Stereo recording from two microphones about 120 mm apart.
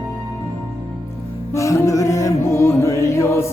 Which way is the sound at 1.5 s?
25° left (ahead or behind).